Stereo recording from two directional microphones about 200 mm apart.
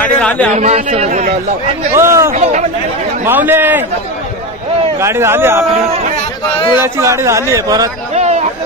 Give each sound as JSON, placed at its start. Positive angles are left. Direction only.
{"t": 0.0, "sound": "speech", "side_deg": 5}
{"t": 0.5, "sound": "speech", "side_deg": -35}
{"t": 2.0, "sound": "speech", "side_deg": -15}
{"t": 2.3, "sound": "speech", "side_deg": -35}
{"t": 3.3, "sound": "speech", "side_deg": -10}
{"t": 5.0, "sound": "speech", "side_deg": -10}
{"t": 6.8, "sound": "speech", "side_deg": -15}
{"t": 8.1, "sound": "a sound", "side_deg": -35}